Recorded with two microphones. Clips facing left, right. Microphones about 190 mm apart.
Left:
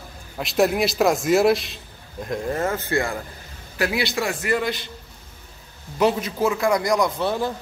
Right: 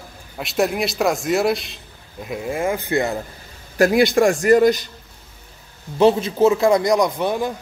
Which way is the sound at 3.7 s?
45° right (ahead or behind).